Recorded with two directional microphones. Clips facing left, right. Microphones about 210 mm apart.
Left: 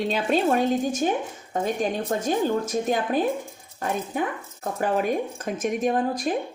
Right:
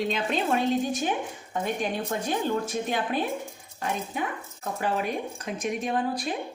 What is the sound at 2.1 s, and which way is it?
Speech, 40° left (ahead or behind).